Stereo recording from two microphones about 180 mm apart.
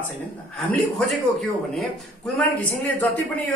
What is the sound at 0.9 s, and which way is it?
A man's voice, centre (ahead or behind).